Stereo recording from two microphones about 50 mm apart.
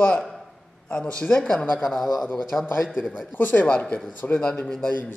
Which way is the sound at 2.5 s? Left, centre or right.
Left.